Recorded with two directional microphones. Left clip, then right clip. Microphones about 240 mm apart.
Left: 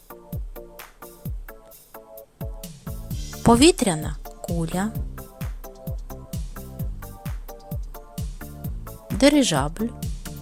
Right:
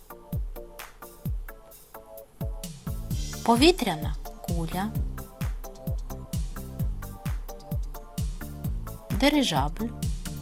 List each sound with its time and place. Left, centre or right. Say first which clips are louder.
0.1 s music: left 2 dB; centre
3.4 s speech: left 4 dB; left
4.9 s music: left 1 dB; centre
9.1 s speech: left 5 dB; left
9.9 s music: left 1 dB; centre